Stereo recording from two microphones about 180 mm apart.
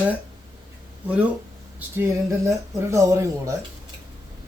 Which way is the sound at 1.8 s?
10° right (ahead or behind).